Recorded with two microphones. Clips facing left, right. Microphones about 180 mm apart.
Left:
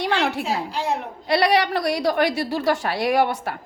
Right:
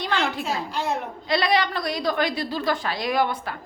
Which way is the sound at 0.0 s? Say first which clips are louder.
Left 3 dB; 70° left (ahead or behind).